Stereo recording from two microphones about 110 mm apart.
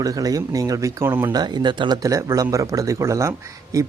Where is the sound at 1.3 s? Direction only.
40° right (ahead or behind).